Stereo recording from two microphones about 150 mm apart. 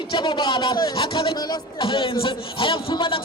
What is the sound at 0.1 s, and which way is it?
A man's voice, 30° left (ahead or behind).